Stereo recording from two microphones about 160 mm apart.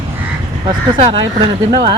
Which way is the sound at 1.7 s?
30° right (ahead or behind).